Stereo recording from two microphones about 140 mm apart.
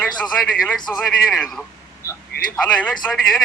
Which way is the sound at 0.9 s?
5° left (ahead or behind).